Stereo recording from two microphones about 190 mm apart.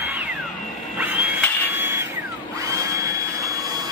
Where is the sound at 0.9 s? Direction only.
10° right (ahead or behind).